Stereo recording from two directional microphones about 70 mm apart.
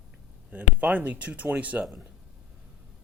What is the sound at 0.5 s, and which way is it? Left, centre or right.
Speech, right.